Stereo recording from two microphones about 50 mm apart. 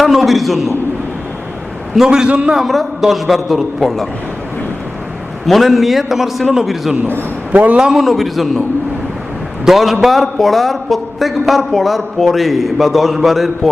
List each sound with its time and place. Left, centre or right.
0.0 s a man's voice: centre
2.0 s a man's voice: centre
2.5 s a man's voice: centre
5.5 s a man's voice: centre
7.5 s a man's voice: right
7.9 s a man's voice: centre
9.6 s a man's voice: centre